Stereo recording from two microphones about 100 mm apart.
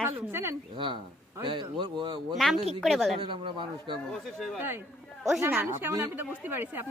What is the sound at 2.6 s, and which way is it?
Speech, 90° right.